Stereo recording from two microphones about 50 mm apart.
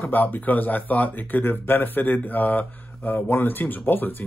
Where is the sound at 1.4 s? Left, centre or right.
Left.